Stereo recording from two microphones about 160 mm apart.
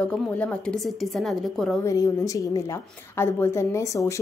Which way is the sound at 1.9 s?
20° left (ahead or behind).